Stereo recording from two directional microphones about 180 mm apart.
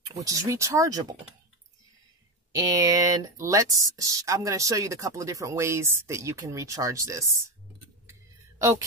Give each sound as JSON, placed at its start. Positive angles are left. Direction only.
{"t": 0.2, "sound": "speech", "side_deg": -20}
{"t": 2.5, "sound": "speech", "side_deg": -20}
{"t": 8.1, "sound": "a sound", "side_deg": -15}